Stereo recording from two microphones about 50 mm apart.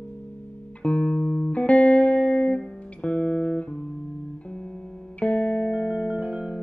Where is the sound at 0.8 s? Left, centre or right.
Left.